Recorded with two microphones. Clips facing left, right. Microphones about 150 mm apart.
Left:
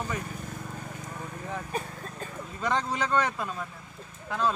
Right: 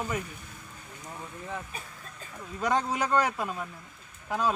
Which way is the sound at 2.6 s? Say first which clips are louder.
Right 1 dB; 10° right (ahead or behind).